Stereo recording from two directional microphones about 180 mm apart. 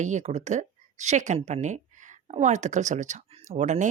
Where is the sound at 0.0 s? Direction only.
40° right (ahead or behind).